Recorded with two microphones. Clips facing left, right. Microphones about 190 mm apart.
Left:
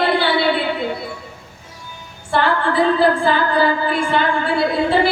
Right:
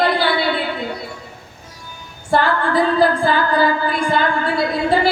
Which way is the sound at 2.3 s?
40° right (ahead or behind).